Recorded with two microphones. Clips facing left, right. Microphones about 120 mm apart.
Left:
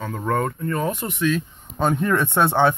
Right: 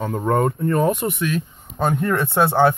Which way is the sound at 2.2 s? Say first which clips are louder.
Right 1 dB; 35° right (ahead or behind).